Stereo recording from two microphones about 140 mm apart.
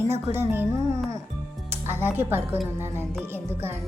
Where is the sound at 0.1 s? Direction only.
15° right (ahead or behind).